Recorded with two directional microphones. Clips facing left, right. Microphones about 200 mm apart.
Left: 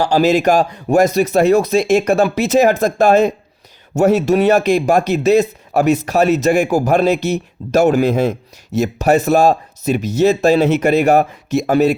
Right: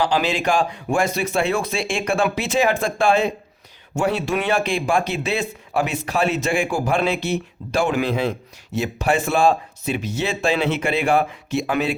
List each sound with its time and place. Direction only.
0.0 s speech: 40° left (ahead or behind)